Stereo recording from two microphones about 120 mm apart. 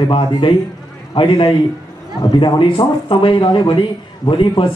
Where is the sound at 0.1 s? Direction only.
40° left (ahead or behind).